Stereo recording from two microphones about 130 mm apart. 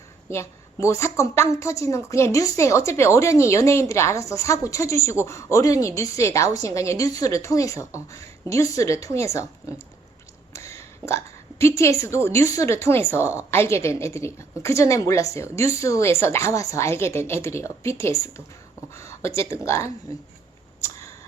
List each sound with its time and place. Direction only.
0.3 s a woman's voice: 20° left (ahead or behind)
10.5 s a sound: 20° left (ahead or behind)
11.6 s a woman's voice: 25° left (ahead or behind)